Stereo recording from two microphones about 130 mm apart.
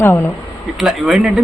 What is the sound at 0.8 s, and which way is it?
Speech, centre (ahead or behind).